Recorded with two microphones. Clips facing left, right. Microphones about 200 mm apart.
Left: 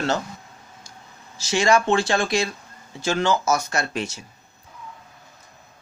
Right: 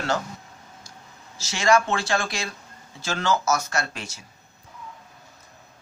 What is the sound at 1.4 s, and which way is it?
Speech, 15° left (ahead or behind).